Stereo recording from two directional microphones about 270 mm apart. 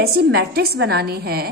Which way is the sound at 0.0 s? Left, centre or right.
Right.